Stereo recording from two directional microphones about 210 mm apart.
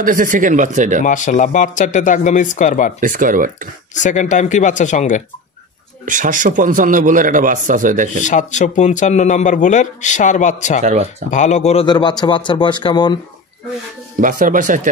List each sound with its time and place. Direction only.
0.0 s a man's voice: 40° right (ahead or behind)
1.0 s speech: 35° left (ahead or behind)
3.0 s a man's voice: 40° right (ahead or behind)
3.9 s speech: 35° left (ahead or behind)
6.0 s a man's voice: 40° right (ahead or behind)
8.2 s speech: 35° left (ahead or behind)
10.8 s a man's voice: 30° right (ahead or behind)
11.2 s speech: 35° left (ahead or behind)
11.8 s speech: 20° left (ahead or behind)
14.2 s a man's voice: 40° right (ahead or behind)